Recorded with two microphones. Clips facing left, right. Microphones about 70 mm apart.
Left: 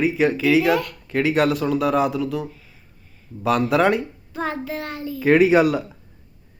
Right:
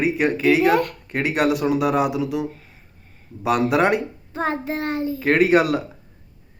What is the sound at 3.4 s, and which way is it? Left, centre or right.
Speech, centre.